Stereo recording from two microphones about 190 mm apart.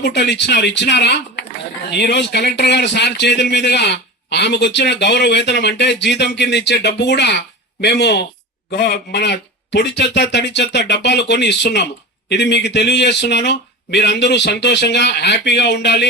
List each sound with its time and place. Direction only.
0.0 s speech: 65° left (ahead or behind)